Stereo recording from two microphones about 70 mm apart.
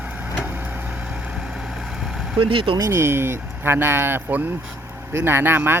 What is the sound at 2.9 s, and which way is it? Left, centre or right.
Speech, right.